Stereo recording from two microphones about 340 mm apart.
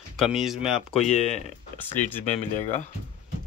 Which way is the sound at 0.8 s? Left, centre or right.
Centre.